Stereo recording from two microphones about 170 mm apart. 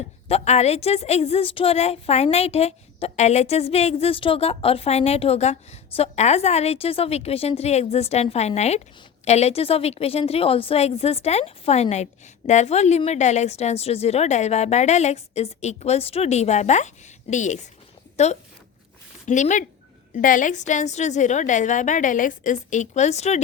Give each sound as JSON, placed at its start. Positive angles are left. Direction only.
{"t": 0.3, "sound": "a woman's voice", "side_deg": 40}